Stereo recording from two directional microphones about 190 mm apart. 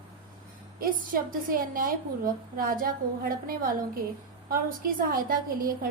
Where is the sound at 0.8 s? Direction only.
45° right (ahead or behind).